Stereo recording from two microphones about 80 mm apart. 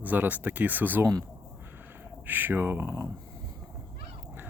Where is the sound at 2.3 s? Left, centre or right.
Right.